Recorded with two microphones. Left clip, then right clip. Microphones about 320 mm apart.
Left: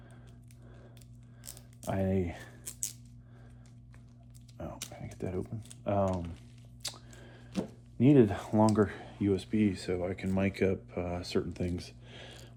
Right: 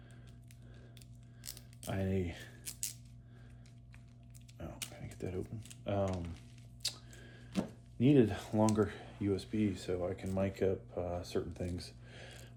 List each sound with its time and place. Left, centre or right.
1.9 s speech: centre
4.5 s a sound: centre
4.9 s speech: centre
6.8 s biting: centre
7.5 s a sound: centre
7.9 s speech: centre